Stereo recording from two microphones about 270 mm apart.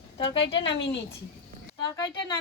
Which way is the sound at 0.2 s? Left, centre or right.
Centre.